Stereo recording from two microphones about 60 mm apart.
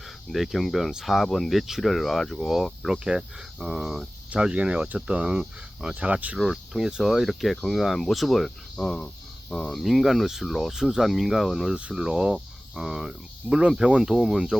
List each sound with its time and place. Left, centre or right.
0.3 s speech: centre
2.9 s speech: centre
5.9 s speech: right
6.4 s speech: centre
9.6 s speech: centre